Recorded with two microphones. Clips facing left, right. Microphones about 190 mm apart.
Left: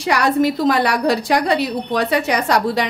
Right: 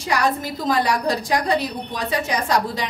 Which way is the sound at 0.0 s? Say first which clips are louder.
Left 6 dB; 70° left (ahead or behind).